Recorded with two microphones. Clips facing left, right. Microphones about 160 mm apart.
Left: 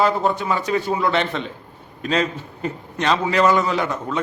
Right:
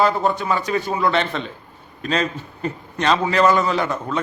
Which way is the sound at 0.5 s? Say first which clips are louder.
Left 1 dB; 20° left (ahead or behind).